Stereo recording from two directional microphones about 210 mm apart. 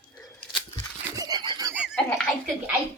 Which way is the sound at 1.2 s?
20° right (ahead or behind).